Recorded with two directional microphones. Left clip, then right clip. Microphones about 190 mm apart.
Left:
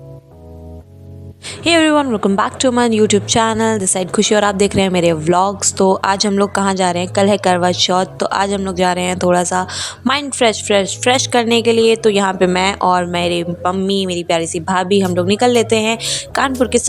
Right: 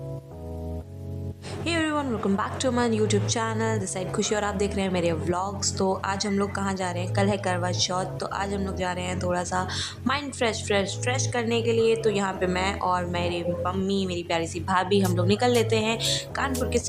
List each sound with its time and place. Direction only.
1.6 s a woman's voice: 45° left (ahead or behind)